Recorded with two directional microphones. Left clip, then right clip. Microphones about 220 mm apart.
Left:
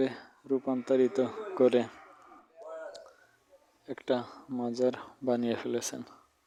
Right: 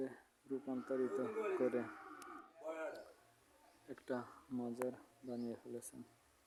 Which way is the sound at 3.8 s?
30° left (ahead or behind).